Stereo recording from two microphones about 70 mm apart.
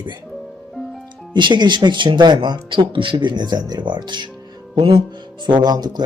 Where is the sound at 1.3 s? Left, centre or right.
Right.